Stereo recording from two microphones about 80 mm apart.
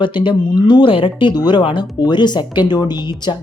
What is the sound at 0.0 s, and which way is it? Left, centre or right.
Speech, left.